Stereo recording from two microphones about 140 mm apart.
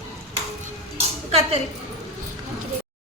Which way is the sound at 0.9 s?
45° right (ahead or behind).